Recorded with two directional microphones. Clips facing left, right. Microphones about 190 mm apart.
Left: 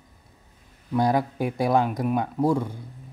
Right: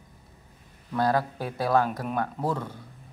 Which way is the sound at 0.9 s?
15° left (ahead or behind).